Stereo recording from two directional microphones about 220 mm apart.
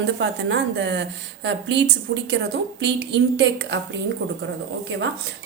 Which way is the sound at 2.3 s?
50° right (ahead or behind).